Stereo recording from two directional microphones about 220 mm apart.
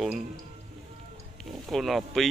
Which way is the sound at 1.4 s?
Centre (ahead or behind).